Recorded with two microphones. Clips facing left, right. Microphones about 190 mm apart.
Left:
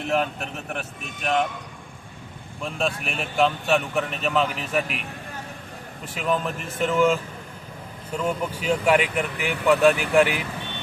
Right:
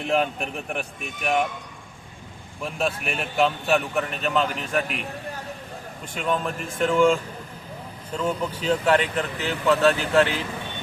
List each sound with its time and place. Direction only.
0.1 s a man's voice: 15° right (ahead or behind)
2.7 s speech: centre (ahead or behind)
6.1 s speech: centre (ahead or behind)